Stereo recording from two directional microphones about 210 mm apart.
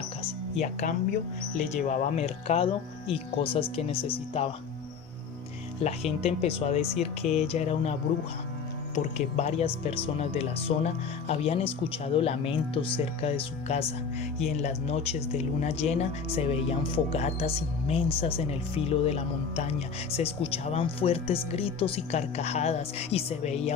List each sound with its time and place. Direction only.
0.6 s speech: 35° left (ahead or behind)
5.8 s speech: 30° left (ahead or behind)
9.1 s speech: 30° left (ahead or behind)